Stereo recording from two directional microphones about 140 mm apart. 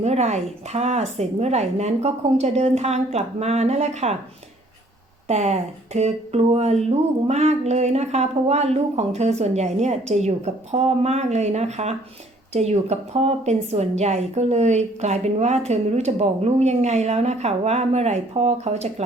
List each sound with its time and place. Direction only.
0.0 s speech: 50° right (ahead or behind)
5.3 s speech: 50° right (ahead or behind)